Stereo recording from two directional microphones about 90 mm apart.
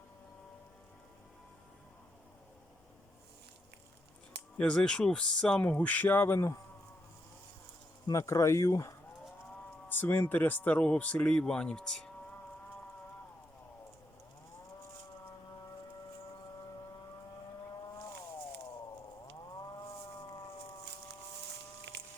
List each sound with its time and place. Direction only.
4.5 s speech: 10° left (ahead or behind); by 6.6 s 30° left (ahead or behind)
8.1 s speech: 35° left (ahead or behind)
9.9 s speech: 20° left (ahead or behind)